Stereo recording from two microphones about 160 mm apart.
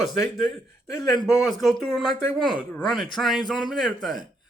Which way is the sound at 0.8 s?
20° left (ahead or behind).